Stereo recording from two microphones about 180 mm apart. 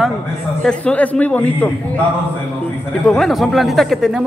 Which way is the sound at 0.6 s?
5° left (ahead or behind).